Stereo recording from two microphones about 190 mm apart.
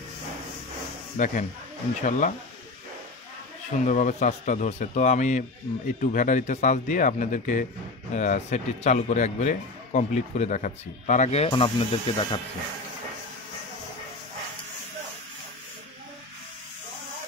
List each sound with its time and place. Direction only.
1.1 s speech: 45° left (ahead or behind)
3.8 s speech: 40° left (ahead or behind)